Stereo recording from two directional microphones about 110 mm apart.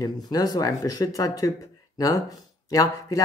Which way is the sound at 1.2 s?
30° left (ahead or behind).